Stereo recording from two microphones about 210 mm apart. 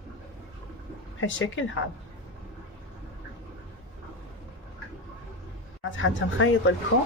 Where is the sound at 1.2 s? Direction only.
65° left (ahead or behind).